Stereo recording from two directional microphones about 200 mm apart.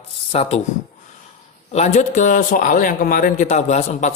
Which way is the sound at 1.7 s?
35° left (ahead or behind).